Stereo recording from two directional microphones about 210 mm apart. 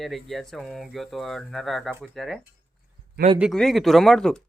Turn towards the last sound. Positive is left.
turn(degrees=5)  # may be behind; listen again after turning